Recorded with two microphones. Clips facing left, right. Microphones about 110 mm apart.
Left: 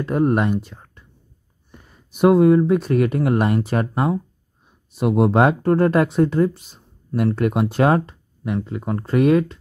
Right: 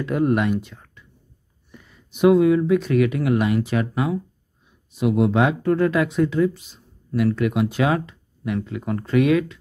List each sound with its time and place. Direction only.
0.0 s speech: 40° left (ahead or behind)
1.0 s whispering: 40° left (ahead or behind)
1.7 s speech: 40° left (ahead or behind)